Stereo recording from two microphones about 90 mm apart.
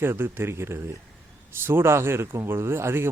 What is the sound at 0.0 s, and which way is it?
Speech, 25° right (ahead or behind).